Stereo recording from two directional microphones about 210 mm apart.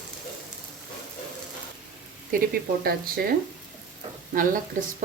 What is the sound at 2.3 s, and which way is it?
Speech, 45° right (ahead or behind).